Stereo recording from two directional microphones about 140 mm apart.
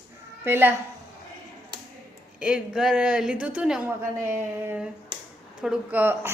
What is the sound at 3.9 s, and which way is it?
A woman's voice, 15° right (ahead or behind).